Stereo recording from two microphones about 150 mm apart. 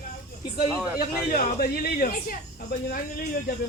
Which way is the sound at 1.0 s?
70° left (ahead or behind).